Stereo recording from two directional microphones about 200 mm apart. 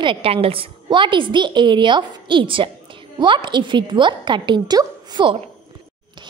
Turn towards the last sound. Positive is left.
turn(degrees=-20)  # may be behind; listen again after turning